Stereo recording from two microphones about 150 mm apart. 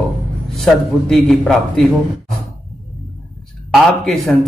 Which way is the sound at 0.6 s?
5° left (ahead or behind).